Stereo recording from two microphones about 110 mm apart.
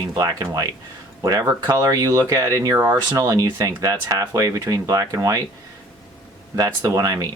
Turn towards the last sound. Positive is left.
turn(degrees=-35)  # may be behind; listen again after turning